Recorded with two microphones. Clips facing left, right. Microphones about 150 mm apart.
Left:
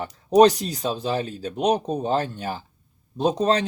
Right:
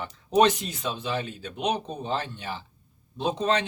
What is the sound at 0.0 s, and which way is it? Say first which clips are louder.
A man's voice: left 6 dB; 40° left (ahead or behind).